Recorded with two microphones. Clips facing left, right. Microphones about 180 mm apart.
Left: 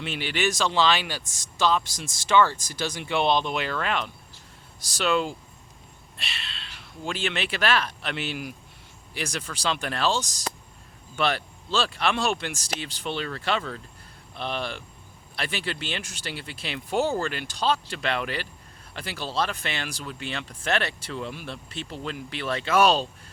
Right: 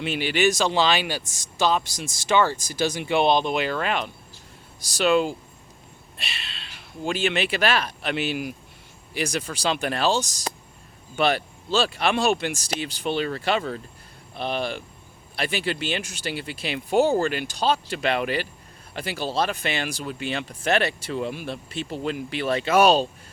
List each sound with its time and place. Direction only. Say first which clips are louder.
0.0 s speech: right 5 dB; 5° right (ahead or behind)
5.0 s speech: right 4 dB; 5° right (ahead or behind)
11.2 s speech: right 4 dB; 10° right (ahead or behind)